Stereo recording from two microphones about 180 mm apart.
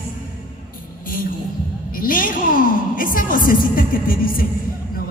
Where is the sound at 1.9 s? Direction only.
50° left (ahead or behind).